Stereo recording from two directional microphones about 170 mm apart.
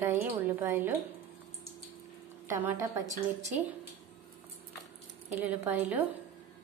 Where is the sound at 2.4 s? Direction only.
15° right (ahead or behind).